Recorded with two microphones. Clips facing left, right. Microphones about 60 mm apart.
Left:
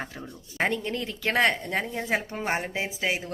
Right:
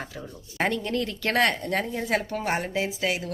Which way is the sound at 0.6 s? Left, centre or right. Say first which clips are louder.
Right 1 dB; centre.